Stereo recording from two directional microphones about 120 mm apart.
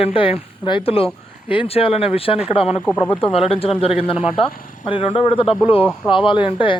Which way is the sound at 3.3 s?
55° left (ahead or behind).